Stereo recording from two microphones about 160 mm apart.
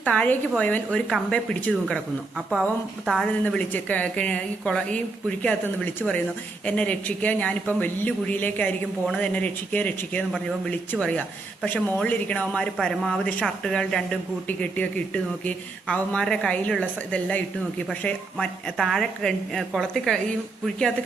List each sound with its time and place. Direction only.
0.0 s speech: 10° left (ahead or behind)
3.1 s speech: 5° left (ahead or behind)